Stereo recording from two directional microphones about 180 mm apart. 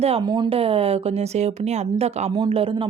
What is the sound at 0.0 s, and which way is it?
Speech, 30° right (ahead or behind).